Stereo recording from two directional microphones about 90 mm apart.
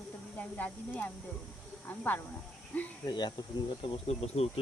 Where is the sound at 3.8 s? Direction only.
85° left.